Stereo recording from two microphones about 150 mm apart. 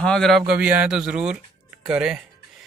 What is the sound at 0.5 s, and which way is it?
Speech, 10° right (ahead or behind).